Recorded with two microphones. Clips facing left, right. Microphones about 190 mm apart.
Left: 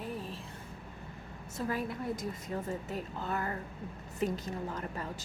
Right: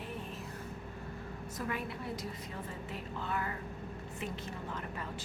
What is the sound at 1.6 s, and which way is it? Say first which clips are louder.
A woman's voice: left 5 dB; 35° left (ahead or behind).